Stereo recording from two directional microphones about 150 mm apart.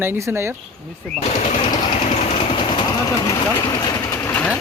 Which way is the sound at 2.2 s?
40° left (ahead or behind).